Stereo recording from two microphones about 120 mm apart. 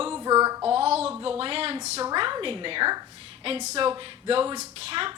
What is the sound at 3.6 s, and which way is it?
Speech, 70° right (ahead or behind).